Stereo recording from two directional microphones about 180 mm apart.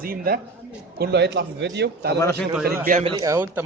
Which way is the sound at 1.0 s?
70° right (ahead or behind).